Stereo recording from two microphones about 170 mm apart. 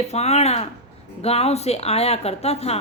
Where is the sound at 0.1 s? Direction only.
40° left (ahead or behind).